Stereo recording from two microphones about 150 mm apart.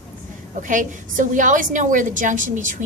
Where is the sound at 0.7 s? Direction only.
60° right (ahead or behind).